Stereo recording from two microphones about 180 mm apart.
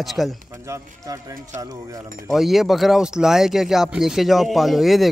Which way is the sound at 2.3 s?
Centre (ahead or behind).